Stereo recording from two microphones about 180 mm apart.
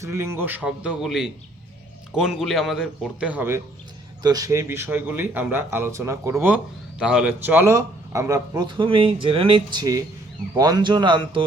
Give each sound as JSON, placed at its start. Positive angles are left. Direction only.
{"t": 0.0, "sound": "a man's voice", "side_deg": -15}